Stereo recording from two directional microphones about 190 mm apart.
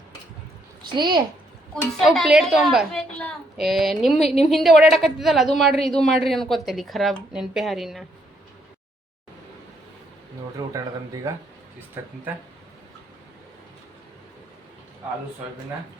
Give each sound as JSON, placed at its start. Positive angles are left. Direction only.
{"t": 0.9, "sound": "a woman's voice", "side_deg": -25}
{"t": 1.7, "sound": "a child's voice", "side_deg": 0}
{"t": 10.6, "sound": "speech", "side_deg": -15}